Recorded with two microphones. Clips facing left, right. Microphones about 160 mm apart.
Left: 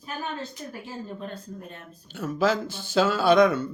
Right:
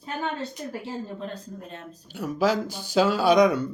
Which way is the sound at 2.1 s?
10° right (ahead or behind).